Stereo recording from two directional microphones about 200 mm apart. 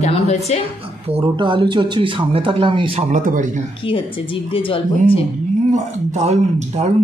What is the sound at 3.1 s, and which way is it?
Speech, 40° right (ahead or behind).